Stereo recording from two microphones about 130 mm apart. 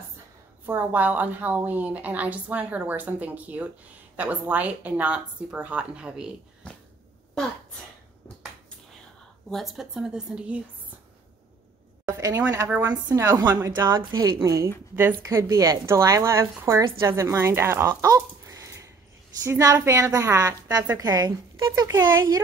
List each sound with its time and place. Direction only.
0.7 s a woman's voice: 15° right (ahead or behind)
6.6 s a sound: 10° left (ahead or behind)
9.5 s a woman's voice: centre (ahead or behind)
12.1 s a sound: 25° right (ahead or behind)
12.4 s a woman's voice: 15° right (ahead or behind)
13.1 s a woman's voice: 25° right (ahead or behind)
13.7 s a woman's voice: 35° right (ahead or behind)